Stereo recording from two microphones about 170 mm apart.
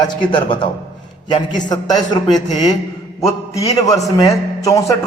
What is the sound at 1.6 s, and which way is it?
Speech, 25° left (ahead or behind).